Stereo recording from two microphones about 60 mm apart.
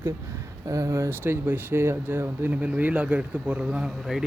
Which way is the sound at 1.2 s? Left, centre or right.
Right.